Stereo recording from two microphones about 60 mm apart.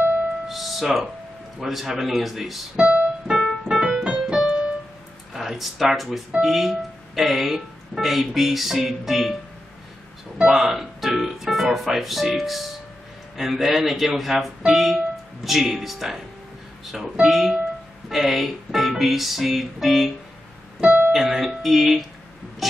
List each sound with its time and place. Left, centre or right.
0.5 s music: centre
1.6 s speech: centre
2.8 s keyboard: centre
3.6 s piano: centre
5.3 s speech: centre
20.8 s piano: right
21.1 s speech: centre
22.6 s music: centre